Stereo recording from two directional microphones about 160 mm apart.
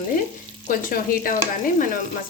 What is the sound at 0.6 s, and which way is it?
Frying, 60° left (ahead or behind).